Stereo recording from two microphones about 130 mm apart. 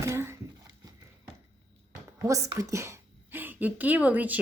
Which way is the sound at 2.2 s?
25° right (ahead or behind).